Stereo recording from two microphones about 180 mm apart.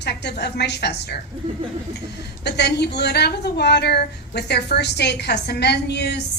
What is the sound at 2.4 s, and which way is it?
A woman's voice, 70° left (ahead or behind).